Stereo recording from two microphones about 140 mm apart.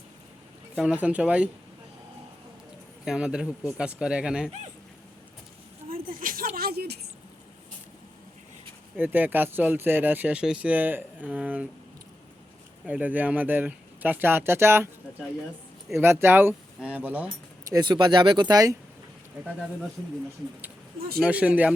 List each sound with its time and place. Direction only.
0.8 s speech: 10° right (ahead or behind)
3.0 s a man's voice: 5° right (ahead or behind)
6.1 s a sound: 90° right
9.0 s speech: 10° right (ahead or behind)
12.8 s speech: 10° right (ahead or behind)
15.9 s speech: 15° right (ahead or behind)
17.7 s speech: 30° right (ahead or behind)
21.2 s speech: 10° right (ahead or behind)